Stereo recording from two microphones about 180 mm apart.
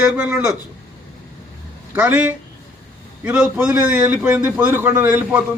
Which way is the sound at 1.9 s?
10° right (ahead or behind).